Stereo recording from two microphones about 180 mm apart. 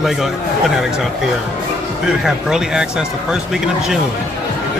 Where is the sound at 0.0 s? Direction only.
Centre (ahead or behind).